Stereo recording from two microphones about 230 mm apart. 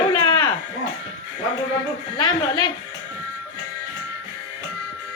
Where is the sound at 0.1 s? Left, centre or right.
Centre.